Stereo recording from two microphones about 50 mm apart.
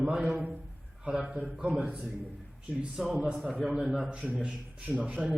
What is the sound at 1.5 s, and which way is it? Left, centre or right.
Speech, centre.